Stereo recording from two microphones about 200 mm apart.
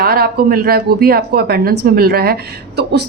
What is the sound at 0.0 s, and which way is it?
A woman's voice, 50° right (ahead or behind).